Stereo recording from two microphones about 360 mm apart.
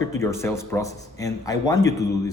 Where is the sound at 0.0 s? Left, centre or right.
Centre.